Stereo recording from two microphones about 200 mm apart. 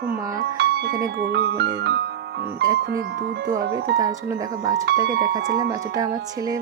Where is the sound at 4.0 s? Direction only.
15° right (ahead or behind).